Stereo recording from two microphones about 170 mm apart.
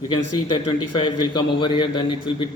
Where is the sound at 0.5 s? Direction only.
25° left (ahead or behind).